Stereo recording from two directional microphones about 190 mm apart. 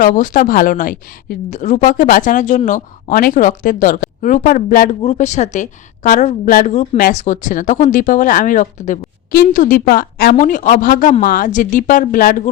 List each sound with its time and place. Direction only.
0.0 s a woman's voice: 45° left (ahead or behind)